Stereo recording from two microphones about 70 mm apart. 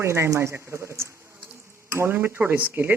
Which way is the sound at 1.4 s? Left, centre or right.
Right.